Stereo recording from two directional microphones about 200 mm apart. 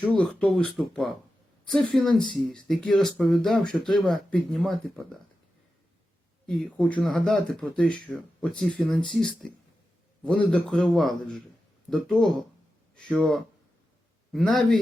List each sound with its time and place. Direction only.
0.2 s speech: 5° left (ahead or behind)
2.1 s speech: 25° left (ahead or behind)
2.6 s speech: centre (ahead or behind)
6.7 s speech: 5° left (ahead or behind)